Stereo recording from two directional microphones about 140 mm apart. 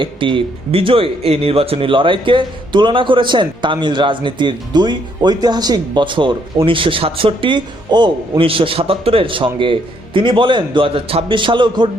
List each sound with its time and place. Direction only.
0.0 s a man's voice: 35° right (ahead or behind)